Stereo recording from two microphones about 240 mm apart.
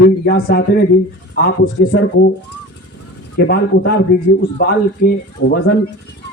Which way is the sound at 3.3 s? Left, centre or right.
Left.